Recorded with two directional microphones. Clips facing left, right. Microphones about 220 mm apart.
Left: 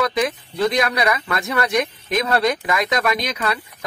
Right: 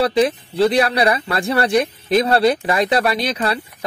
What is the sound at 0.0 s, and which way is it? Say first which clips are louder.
Speech: right 5 dB; 30° right (ahead or behind).